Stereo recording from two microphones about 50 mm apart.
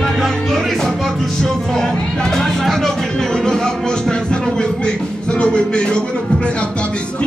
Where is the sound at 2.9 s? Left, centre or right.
Centre.